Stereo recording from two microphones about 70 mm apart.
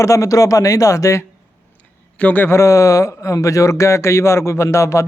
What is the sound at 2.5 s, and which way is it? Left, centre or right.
A man's voice, left.